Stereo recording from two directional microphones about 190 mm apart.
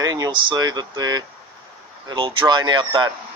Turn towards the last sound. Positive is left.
turn(degrees=-25)  # may be behind; listen again after turning